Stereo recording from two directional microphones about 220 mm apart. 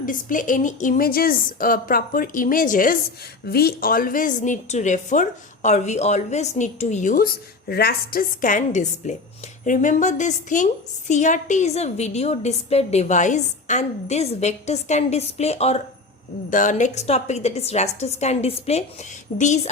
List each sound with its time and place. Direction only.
0.0 s a woman's voice: 35° left (ahead or behind)